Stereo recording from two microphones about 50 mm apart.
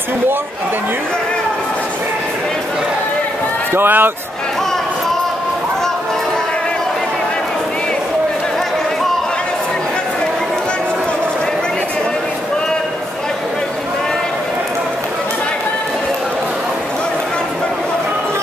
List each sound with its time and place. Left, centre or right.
3.7 s a man's voice: right